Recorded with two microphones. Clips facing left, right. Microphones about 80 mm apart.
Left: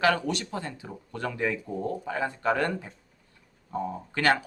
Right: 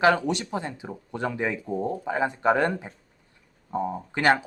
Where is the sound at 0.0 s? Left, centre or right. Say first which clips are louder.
Right 4 dB; right.